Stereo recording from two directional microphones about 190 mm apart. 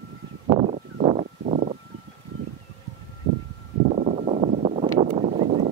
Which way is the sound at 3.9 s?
40° right (ahead or behind).